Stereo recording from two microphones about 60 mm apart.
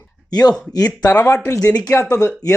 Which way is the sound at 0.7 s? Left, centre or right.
Left.